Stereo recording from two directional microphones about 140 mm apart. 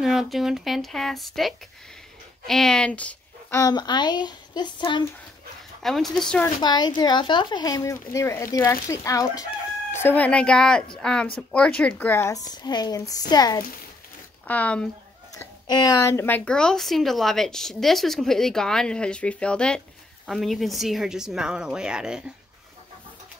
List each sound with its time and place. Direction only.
0.0 s a woman's voice: centre (ahead or behind)
3.5 s speech: 30° left (ahead or behind)
5.8 s a woman's voice: centre (ahead or behind)
6.6 s speech: 30° left (ahead or behind)
9.9 s a woman's voice: 15° left (ahead or behind)
14.5 s speech: 10° left (ahead or behind)
15.3 s a woman's voice: 30° left (ahead or behind); by 22.2 s 5° right (ahead or behind)